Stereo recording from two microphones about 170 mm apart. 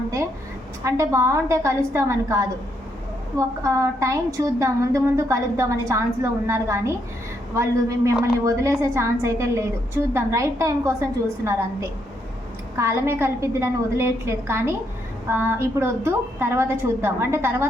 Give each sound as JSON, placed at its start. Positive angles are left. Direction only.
{"t": 0.9, "sound": "a woman's voice", "side_deg": -15}